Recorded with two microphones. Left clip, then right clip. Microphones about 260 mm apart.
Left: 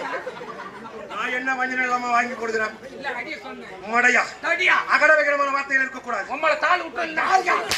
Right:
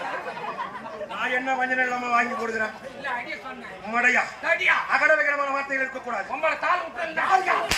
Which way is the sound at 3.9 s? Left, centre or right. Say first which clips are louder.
Left 3 dB; left.